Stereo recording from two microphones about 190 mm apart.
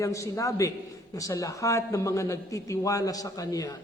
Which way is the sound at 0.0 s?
15° left (ahead or behind).